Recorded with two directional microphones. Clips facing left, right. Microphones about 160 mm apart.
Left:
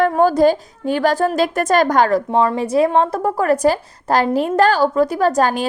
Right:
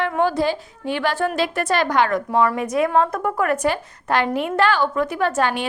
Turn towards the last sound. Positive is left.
turn(degrees=40)  # may be behind; listen again after turning